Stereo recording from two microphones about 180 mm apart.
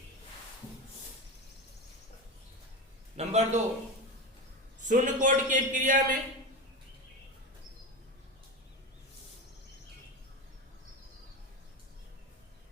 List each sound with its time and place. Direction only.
3.2 s a man's voice: 40° right (ahead or behind)
4.8 s a man's voice: 45° right (ahead or behind)